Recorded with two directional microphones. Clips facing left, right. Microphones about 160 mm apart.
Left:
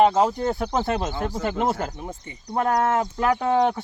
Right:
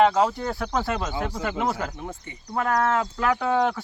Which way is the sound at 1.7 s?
30° left (ahead or behind).